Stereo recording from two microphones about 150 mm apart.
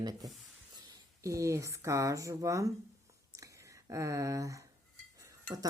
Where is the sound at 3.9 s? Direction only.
20° right (ahead or behind).